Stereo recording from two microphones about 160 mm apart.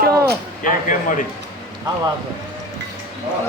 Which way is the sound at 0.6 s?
55° left (ahead or behind).